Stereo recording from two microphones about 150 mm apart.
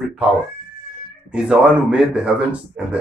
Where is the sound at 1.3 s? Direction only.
5° right (ahead or behind).